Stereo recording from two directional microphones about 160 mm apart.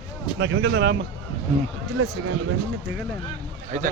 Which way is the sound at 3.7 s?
50° right (ahead or behind).